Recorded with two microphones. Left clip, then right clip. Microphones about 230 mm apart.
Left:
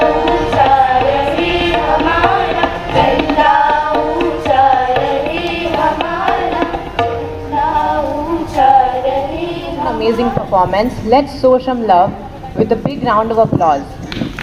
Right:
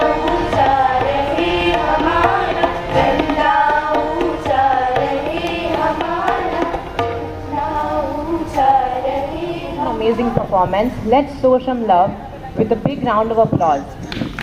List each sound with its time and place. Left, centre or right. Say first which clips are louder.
0.0 s music: left 4 dB; left
5.3 s tabla: left 3 dB; left
8.6 s a sound: left 4 dB; left
10.5 s speech: left 3 dB; centre